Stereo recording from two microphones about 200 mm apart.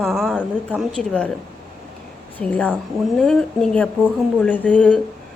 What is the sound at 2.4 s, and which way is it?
A woman's voice, 5° left (ahead or behind).